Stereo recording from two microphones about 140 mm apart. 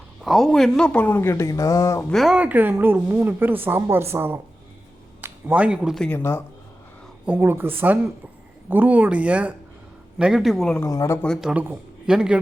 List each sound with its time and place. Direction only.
0.2 s speech: centre (ahead or behind); by 2.0 s 25° left (ahead or behind)
2.0 s a woman's voice: centre (ahead or behind)
6.1 s speech: 15° left (ahead or behind)
7.3 s a woman's voice: 15° right (ahead or behind); by 10.8 s centre (ahead or behind)
10.8 s speech: 25° left (ahead or behind)
11.3 s speech: 10° right (ahead or behind)